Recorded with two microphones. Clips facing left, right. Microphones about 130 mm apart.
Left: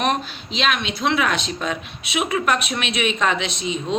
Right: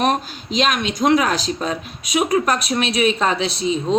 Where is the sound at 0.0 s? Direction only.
40° right (ahead or behind).